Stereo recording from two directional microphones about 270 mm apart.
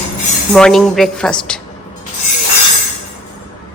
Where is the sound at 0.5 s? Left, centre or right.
Centre.